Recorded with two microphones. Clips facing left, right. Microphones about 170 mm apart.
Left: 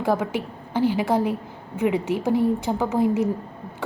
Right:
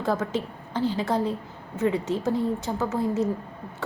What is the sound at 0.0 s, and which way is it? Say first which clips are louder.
A woman's voice: left 3 dB; 15° left (ahead or behind).